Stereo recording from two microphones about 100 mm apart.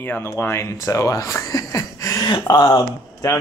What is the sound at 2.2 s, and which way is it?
Speech, 45° left (ahead or behind).